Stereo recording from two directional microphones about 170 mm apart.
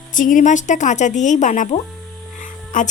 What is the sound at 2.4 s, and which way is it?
Music, 50° left (ahead or behind).